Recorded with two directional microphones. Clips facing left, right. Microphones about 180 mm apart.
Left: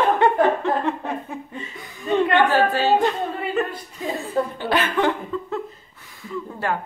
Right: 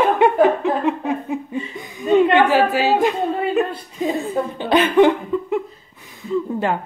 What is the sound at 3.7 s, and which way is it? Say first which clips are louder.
Speech: right 6 dB; 20° right (ahead or behind).